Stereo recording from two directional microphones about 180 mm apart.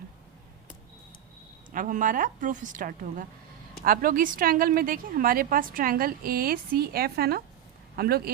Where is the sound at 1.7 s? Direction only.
50° right (ahead or behind).